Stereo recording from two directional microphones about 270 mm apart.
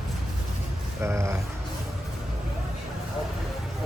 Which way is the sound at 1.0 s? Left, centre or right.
Centre.